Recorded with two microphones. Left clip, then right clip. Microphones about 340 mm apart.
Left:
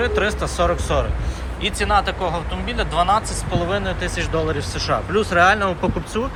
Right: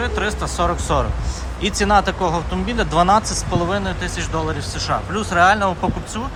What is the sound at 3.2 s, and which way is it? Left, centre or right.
Speech, right.